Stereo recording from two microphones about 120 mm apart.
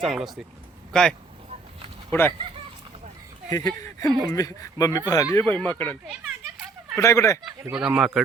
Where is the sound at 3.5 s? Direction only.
30° left (ahead or behind).